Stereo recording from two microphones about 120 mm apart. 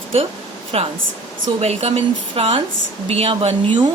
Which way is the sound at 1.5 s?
60° right (ahead or behind).